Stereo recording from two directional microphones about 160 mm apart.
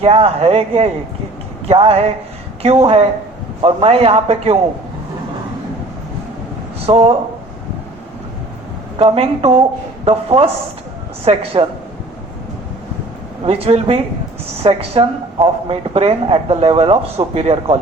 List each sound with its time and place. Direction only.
0.0 s speech: 40° right (ahead or behind)
6.8 s speech: 40° right (ahead or behind)
9.0 s speech: 35° right (ahead or behind)
13.4 s speech: 40° right (ahead or behind)